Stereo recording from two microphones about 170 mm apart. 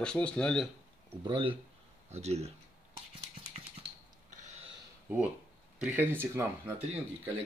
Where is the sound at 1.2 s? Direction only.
30° right (ahead or behind).